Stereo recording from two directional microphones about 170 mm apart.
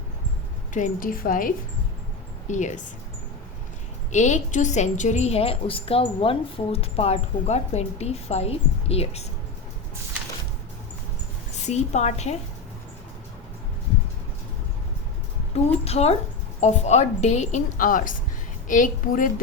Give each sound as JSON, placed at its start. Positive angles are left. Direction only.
{"t": 0.7, "sound": "a woman's voice", "side_deg": 50}
{"t": 2.5, "sound": "speech", "side_deg": 45}
{"t": 4.1, "sound": "a woman's voice", "side_deg": 45}
{"t": 11.6, "sound": "a woman's voice", "side_deg": 40}
{"t": 15.5, "sound": "a woman's voice", "side_deg": 35}